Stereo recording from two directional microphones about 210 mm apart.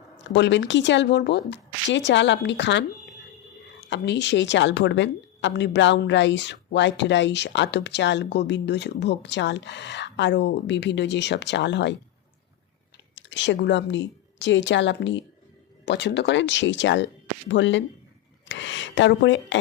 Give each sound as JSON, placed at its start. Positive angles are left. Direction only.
{"t": 0.2, "sound": "a woman's voice", "side_deg": 60}
{"t": 13.1, "sound": "a woman's voice", "side_deg": 60}
{"t": 18.4, "sound": "a sound", "side_deg": 60}